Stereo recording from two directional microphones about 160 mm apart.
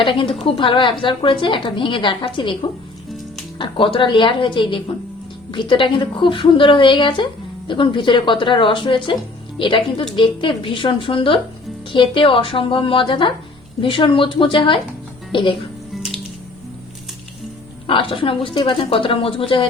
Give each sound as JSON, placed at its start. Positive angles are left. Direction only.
{"t": 0.0, "sound": "a woman's voice", "side_deg": 35}
{"t": 17.8, "sound": "a woman's voice", "side_deg": 35}